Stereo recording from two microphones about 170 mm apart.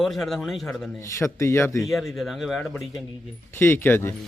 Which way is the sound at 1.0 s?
15° left (ahead or behind).